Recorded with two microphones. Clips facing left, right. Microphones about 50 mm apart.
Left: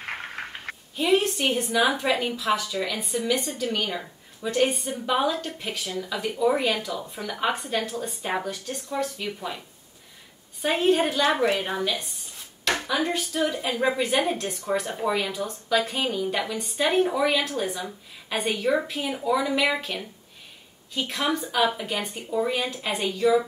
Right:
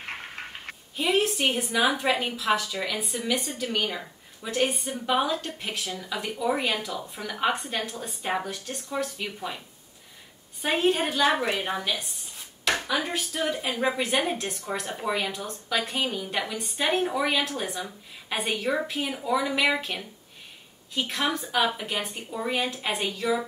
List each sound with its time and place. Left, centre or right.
0.0 s a sound: left
0.9 s a woman's voice: centre
10.6 s a woman's voice: centre